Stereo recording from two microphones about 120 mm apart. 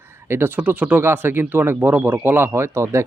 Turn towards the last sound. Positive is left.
turn(degrees=-25)  # may be behind; listen again after turning